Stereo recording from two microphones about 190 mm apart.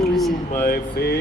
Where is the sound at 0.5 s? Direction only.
50° left (ahead or behind).